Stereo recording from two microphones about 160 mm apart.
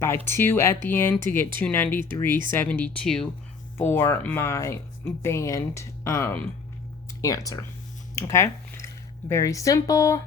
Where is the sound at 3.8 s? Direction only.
15° left (ahead or behind).